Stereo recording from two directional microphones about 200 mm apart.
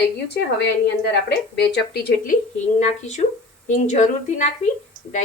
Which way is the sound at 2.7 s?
35° left (ahead or behind).